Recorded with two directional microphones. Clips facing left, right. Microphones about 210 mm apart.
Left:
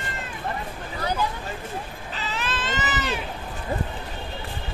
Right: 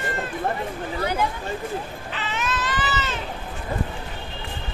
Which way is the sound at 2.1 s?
40° left (ahead or behind).